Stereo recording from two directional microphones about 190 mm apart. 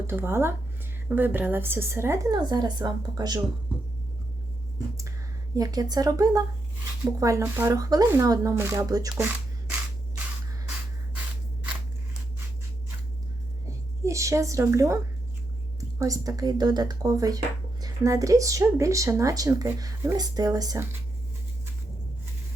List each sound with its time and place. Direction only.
0.1 s a woman's voice: 10° right (ahead or behind)
5.5 s a woman's voice: 20° right (ahead or behind)
14.0 s a woman's voice: 15° right (ahead or behind)